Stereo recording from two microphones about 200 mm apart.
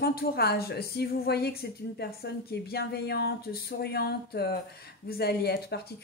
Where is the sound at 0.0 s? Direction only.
50° left (ahead or behind).